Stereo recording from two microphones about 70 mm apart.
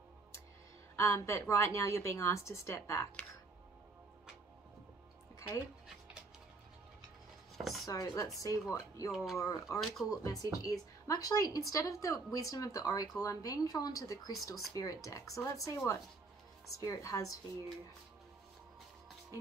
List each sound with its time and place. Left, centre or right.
0.9 s a woman's voice: left
7.5 s chopping: centre
7.8 s a woman's voice: left
8.4 s a woman's voice: left
9.1 s speech: centre
9.4 s a woman's voice: left